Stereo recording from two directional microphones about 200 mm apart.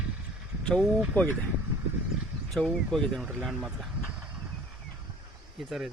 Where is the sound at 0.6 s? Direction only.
Centre (ahead or behind).